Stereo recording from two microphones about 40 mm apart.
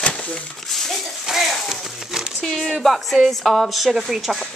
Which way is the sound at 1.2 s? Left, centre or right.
Centre.